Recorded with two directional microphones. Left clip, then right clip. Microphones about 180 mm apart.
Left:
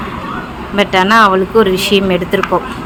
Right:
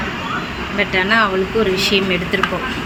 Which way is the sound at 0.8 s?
60° left (ahead or behind).